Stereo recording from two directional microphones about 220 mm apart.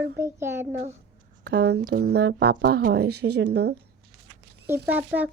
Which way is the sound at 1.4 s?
50° right (ahead or behind).